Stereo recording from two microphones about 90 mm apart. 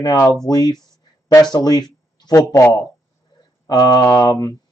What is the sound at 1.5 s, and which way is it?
Speech, 50° left (ahead or behind).